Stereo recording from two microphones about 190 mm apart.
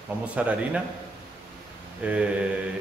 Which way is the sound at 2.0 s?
5° right (ahead or behind).